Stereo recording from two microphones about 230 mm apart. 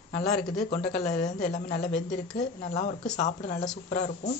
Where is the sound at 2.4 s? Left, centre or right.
Left.